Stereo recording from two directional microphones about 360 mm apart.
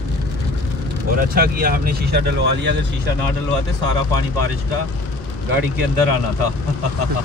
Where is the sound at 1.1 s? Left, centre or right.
Right.